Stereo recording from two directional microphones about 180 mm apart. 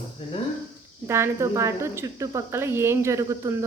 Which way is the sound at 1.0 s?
15° right (ahead or behind).